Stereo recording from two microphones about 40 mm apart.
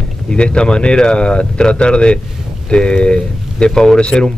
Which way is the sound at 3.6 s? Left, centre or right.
Centre.